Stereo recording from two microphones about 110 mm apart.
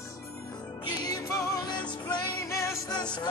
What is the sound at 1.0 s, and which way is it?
Music, 35° left (ahead or behind).